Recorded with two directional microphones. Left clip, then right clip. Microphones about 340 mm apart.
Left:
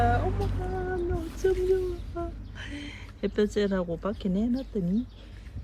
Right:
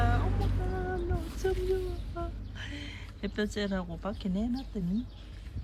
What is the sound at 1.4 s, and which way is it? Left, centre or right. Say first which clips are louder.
Speech: left 6 dB; centre.